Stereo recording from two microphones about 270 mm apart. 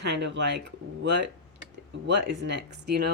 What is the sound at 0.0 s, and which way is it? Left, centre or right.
Speech, right.